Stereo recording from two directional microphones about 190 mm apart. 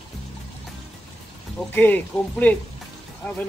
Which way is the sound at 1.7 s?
10° left (ahead or behind).